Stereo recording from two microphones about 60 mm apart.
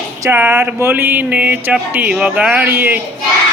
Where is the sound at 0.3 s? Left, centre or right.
Right.